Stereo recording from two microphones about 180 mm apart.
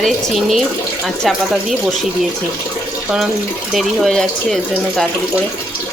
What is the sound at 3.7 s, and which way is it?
Speech, centre (ahead or behind).